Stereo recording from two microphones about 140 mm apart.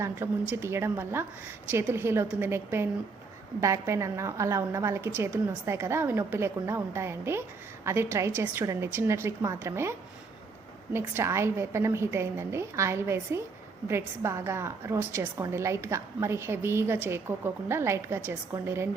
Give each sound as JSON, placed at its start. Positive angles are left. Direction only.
{"t": 0.0, "sound": "a woman's voice", "side_deg": -15}
{"t": 10.9, "sound": "a woman's voice", "side_deg": -20}